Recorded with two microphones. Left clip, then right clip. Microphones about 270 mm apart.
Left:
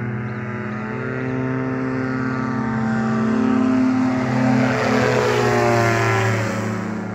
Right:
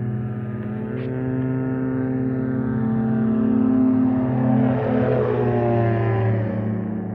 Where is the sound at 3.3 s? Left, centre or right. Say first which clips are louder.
Left 1 dB; left.